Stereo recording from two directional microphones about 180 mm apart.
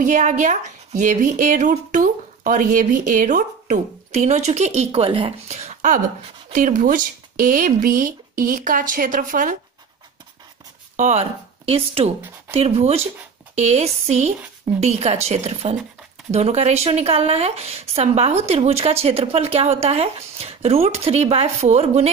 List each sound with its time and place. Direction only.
0.0 s speech: 45° right (ahead or behind)
11.0 s speech: 40° right (ahead or behind)